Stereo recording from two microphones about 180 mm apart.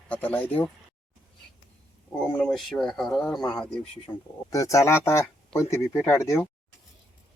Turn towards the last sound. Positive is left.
turn(degrees=15)  # may be behind; listen again after turning